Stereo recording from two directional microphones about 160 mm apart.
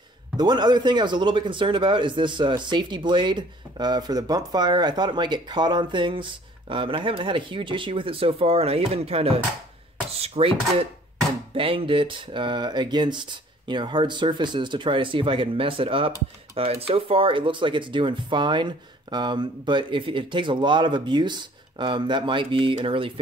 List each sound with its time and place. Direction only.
0.4 s speech: 25° right (ahead or behind)